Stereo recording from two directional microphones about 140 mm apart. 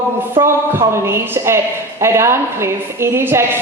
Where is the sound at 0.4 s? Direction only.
35° right (ahead or behind).